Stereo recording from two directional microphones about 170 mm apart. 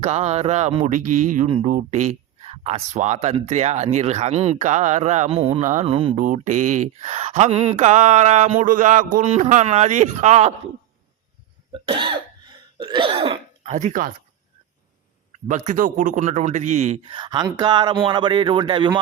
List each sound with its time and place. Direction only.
0.0 s speech: 40° right (ahead or behind)
6.1 s speech: 45° right (ahead or behind)
11.7 s cough: 30° right (ahead or behind); by 14.1 s 50° right (ahead or behind)
15.4 s speech: 50° right (ahead or behind); by 18.9 s 30° right (ahead or behind)